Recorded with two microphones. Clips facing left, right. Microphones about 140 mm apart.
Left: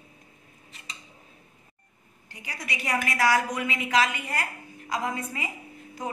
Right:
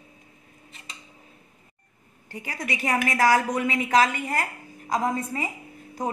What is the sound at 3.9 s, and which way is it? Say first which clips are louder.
A woman's voice: right 4 dB; 35° right (ahead or behind).